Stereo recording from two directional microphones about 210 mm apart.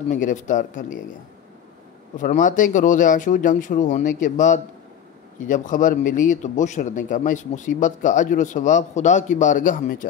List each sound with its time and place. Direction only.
0.1 s speech: 35° left (ahead or behind)
2.1 s speech: 40° left (ahead or behind)